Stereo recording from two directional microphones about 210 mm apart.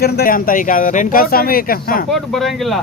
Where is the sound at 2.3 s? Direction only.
Centre (ahead or behind).